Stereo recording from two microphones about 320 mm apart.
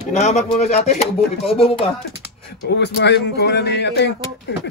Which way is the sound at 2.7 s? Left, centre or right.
Left.